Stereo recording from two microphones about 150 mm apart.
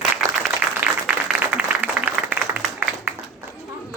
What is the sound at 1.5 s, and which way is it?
Applause, 10° right (ahead or behind).